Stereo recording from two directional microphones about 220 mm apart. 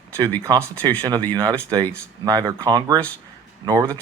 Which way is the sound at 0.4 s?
15° right (ahead or behind).